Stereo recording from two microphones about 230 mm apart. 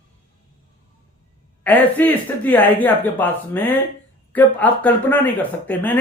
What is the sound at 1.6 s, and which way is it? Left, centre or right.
Speech, centre.